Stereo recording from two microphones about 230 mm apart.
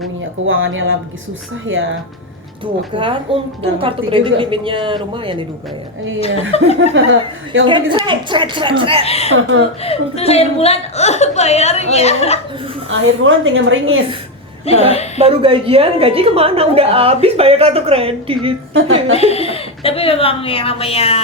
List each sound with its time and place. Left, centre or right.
0.4 s a woman's voice: right
2.9 s a woman's voice: right
6.5 s a woman's voice: left
6.9 s a woman's voice: right
8.0 s a woman's voice: right
9.0 s a woman's voice: left
9.3 s a woman's voice: right
9.8 s a woman's voice: left
12.9 s a woman's voice: right
14.7 s a woman's voice: left
15.2 s a woman's voice: right
19.1 s a woman's voice: left